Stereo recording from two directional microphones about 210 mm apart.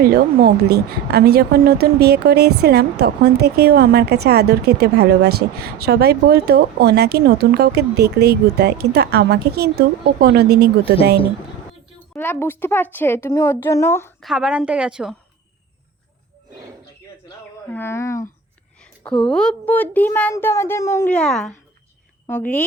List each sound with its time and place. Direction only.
0.0 s a woman's voice: 45° right (ahead or behind)
12.1 s a child's voice: 10° left (ahead or behind)
14.2 s a woman's voice: 5° right (ahead or behind)
17.7 s a child's voice: 10° left (ahead or behind)